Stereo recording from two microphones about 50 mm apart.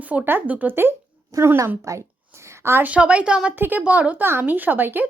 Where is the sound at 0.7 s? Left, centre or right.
Right.